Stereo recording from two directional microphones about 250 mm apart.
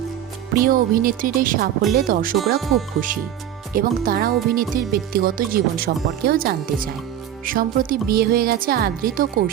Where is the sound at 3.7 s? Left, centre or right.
Right.